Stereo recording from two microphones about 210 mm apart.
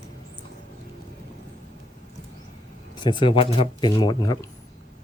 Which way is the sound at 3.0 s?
20° left (ahead or behind).